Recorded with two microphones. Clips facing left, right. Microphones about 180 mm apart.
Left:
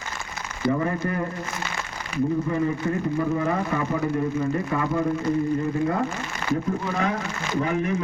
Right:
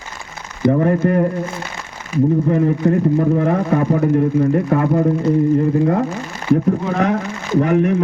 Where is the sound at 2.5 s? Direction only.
55° right (ahead or behind).